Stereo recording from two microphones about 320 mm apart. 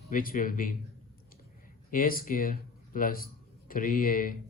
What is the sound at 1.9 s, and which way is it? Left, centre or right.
Speech, left.